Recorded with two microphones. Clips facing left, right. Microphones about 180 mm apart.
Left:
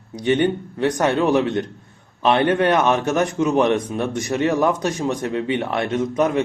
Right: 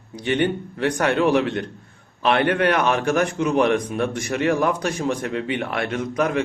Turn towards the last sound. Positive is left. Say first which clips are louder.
# left 3 dB
turn(degrees=25)  # may be behind; listen again after turning